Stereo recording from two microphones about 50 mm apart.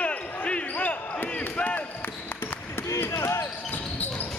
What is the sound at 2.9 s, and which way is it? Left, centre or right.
Basketball bounce, left.